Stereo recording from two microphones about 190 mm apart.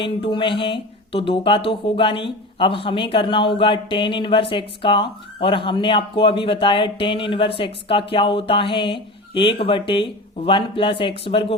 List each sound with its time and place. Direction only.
0.0 s speech: 25° left (ahead or behind)